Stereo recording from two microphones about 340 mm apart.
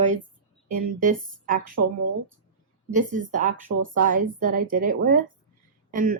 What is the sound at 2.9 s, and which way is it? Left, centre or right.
A woman's voice, right.